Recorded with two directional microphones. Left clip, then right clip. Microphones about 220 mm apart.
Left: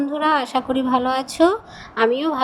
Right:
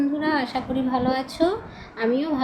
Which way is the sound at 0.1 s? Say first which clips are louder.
Left 5 dB; 30° left (ahead or behind).